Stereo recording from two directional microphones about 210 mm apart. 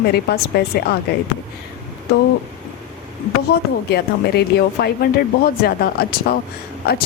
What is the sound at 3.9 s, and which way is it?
Speech, 50° left (ahead or behind).